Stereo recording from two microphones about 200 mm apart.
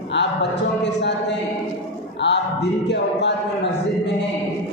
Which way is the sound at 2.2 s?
60° left (ahead or behind).